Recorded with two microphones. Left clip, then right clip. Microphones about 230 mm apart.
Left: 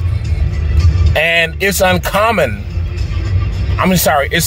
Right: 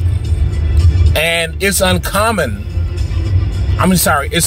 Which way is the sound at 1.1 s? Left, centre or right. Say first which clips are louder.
Left 2 dB; centre.